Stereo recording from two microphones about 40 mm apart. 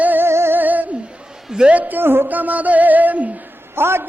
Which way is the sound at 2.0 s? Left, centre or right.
Right.